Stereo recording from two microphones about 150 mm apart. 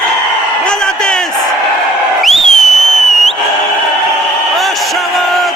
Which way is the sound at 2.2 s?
Centre (ahead or behind).